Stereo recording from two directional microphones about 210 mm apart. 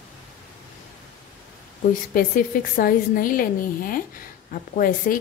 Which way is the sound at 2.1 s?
45° left (ahead or behind).